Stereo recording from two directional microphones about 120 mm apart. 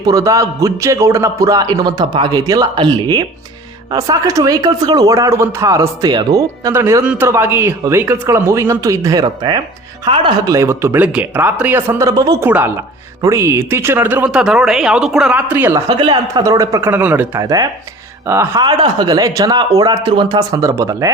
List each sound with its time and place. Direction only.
0.0 s a man's voice: 30° right (ahead or behind)
3.9 s speech: 30° right (ahead or behind)
7.0 s a man's voice: 10° right (ahead or behind); by 10.5 s 40° right (ahead or behind)
10.5 s speech: 25° right (ahead or behind)
12.4 s speech: 15° right (ahead or behind)
14.3 s speech: 5° right (ahead or behind)
15.7 s speech: 35° right (ahead or behind)
16.9 s speech: 15° right (ahead or behind)
17.4 s a man's voice: 30° right (ahead or behind)
18.6 s a man's voice: 40° right (ahead or behind)
20.6 s speech: 25° right (ahead or behind)